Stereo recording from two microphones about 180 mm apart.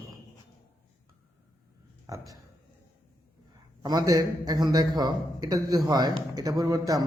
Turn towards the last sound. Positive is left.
turn(degrees=-20)  # may be behind; listen again after turning